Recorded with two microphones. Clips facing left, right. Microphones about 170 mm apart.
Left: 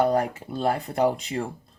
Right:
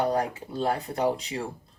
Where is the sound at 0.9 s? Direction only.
50° left (ahead or behind).